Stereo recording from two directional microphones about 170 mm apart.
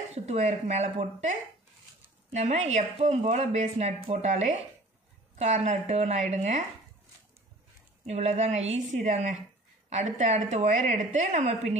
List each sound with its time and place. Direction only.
0.1 s a woman's voice: 40° right (ahead or behind)
8.0 s a woman's voice: 40° right (ahead or behind)